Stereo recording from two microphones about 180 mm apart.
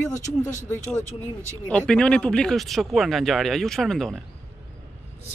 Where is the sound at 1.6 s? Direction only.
5° left (ahead or behind).